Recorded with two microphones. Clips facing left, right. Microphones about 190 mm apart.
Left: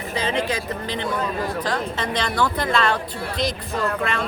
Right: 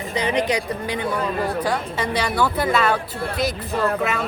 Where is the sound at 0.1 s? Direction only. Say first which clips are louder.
Right 3 dB; 15° right (ahead or behind).